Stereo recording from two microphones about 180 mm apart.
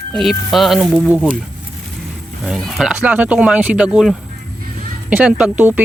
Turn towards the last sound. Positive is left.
turn(degrees=-10)  # may be behind; listen again after turning